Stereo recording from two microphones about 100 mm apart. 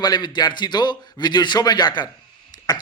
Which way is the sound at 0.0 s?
45° left (ahead or behind).